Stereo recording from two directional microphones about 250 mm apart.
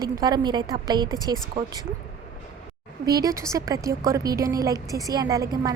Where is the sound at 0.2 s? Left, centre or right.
Centre.